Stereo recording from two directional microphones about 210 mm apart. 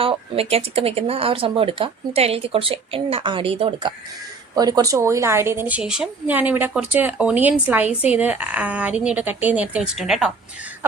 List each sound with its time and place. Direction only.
0.0 s a woman's voice: 25° right (ahead or behind); by 10.3 s centre (ahead or behind)